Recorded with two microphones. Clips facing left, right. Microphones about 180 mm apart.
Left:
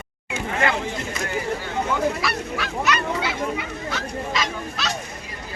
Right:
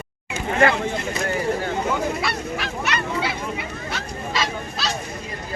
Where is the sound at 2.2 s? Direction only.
30° right (ahead or behind).